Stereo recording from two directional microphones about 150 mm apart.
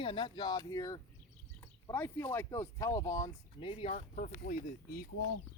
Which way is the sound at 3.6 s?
40° left (ahead or behind).